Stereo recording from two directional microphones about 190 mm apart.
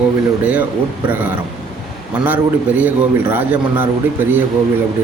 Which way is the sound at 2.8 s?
10° right (ahead or behind).